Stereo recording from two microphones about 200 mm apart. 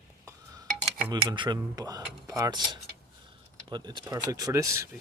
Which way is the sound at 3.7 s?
20° right (ahead or behind).